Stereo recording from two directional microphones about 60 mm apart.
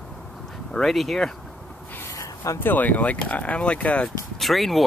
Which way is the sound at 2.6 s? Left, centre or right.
Left.